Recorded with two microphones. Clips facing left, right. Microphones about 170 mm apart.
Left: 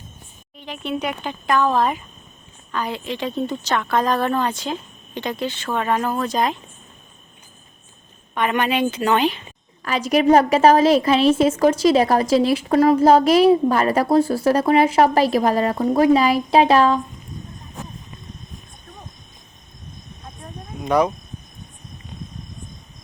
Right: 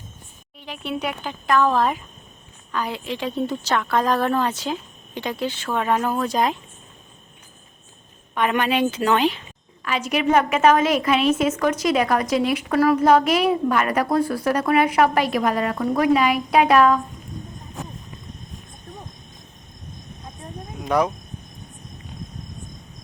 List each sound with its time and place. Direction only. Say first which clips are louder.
0.6 s a woman's voice: left 2 dB; 10° right (ahead or behind)
8.4 s a woman's voice: even; centre (ahead or behind)
9.8 s a woman's voice: left 5 dB; 40° left (ahead or behind)
20.8 s speech: left 2 dB; centre (ahead or behind)